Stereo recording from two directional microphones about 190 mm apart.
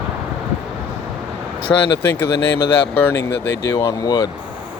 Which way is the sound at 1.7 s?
10° left (ahead or behind).